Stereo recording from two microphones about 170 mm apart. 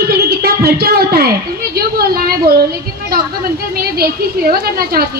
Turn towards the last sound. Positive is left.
turn(degrees=-60)  # may be behind; listen again after turning